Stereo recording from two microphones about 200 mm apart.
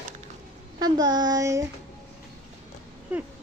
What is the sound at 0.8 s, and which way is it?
Child singing, 20° right (ahead or behind).